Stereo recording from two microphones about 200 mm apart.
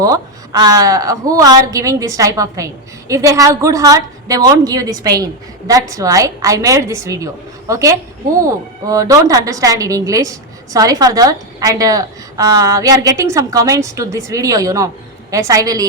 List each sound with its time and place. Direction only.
0.0 s a woman's voice: 20° right (ahead or behind)